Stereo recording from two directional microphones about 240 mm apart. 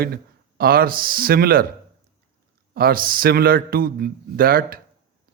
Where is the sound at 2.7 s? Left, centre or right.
Right.